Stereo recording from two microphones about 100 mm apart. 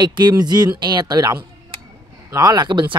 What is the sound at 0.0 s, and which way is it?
Speech, 45° right (ahead or behind).